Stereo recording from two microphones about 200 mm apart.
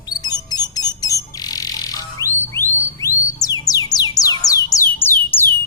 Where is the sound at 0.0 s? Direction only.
20° left (ahead or behind).